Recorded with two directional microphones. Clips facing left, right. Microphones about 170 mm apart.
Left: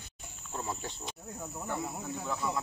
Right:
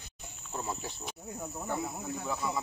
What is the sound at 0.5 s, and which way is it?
Cricket, centre (ahead or behind).